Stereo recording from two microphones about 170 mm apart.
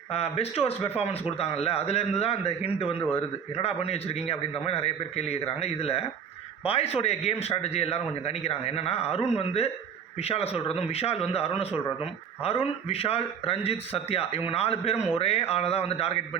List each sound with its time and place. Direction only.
0.1 s speech: 35° left (ahead or behind)